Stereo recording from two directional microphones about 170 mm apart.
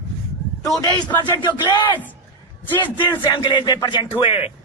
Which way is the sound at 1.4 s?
25° left (ahead or behind).